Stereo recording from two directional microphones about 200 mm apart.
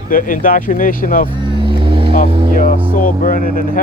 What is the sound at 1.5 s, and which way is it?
Vehicle, 25° right (ahead or behind).